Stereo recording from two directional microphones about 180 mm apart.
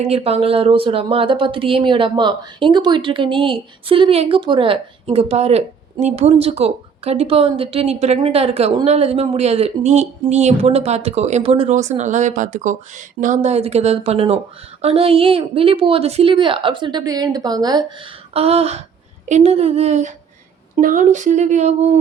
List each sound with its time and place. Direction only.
0.0 s a woman's voice: 35° right (ahead or behind)
18.3 s speech: 35° right (ahead or behind)